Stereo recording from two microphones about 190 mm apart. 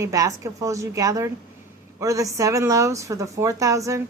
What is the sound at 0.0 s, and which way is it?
A woman's voice, 15° right (ahead or behind).